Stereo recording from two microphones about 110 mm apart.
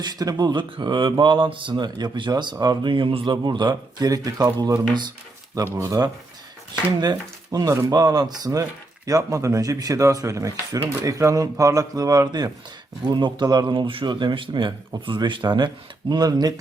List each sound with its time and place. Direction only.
0.0 s speech: 35° right (ahead or behind)
5.6 s speech: 30° right (ahead or behind)